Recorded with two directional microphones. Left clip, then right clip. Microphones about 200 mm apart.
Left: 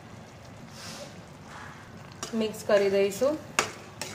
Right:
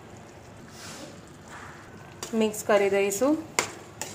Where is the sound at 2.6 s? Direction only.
30° right (ahead or behind).